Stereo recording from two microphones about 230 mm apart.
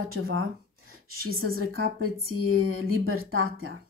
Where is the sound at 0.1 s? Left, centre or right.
Right.